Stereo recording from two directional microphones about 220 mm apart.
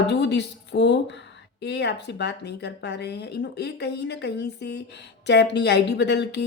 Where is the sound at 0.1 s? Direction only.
50° left (ahead or behind).